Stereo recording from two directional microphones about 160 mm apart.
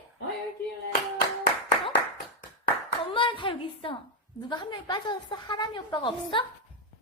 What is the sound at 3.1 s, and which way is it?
A woman's voice, 30° left (ahead or behind).